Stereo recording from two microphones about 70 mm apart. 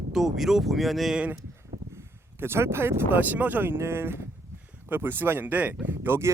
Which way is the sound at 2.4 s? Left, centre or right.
Right.